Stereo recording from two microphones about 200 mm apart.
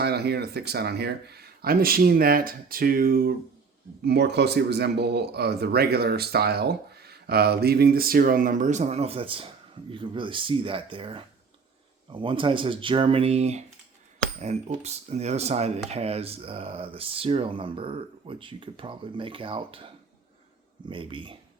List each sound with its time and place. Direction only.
0.0 s speech: 55° right (ahead or behind); by 19.9 s 25° right (ahead or behind)
20.9 s speech: 25° right (ahead or behind)